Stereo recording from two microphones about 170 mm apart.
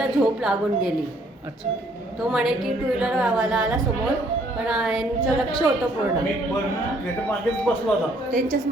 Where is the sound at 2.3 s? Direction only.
Centre (ahead or behind).